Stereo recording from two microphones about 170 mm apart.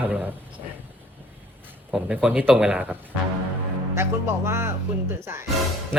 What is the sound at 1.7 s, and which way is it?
Speech, 10° right (ahead or behind).